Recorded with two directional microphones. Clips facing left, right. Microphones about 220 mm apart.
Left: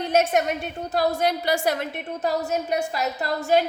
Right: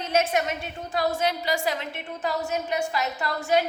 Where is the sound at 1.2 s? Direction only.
45° left (ahead or behind).